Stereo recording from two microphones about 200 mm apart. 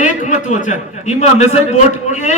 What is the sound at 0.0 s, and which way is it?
A man's voice, 40° left (ahead or behind).